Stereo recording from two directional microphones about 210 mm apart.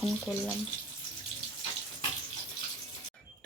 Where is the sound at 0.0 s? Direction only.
Centre (ahead or behind).